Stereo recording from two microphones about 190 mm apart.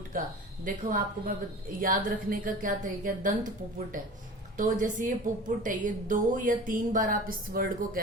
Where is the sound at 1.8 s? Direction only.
45° right (ahead or behind).